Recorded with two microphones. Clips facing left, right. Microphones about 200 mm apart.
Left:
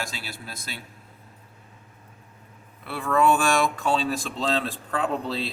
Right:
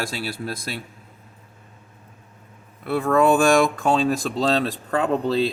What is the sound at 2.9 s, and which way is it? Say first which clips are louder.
Speech: right 4 dB; 45° right (ahead or behind).